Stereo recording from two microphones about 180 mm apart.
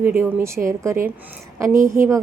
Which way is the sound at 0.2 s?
15° right (ahead or behind).